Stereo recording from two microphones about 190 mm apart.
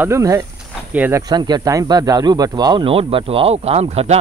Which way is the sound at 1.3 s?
20° right (ahead or behind).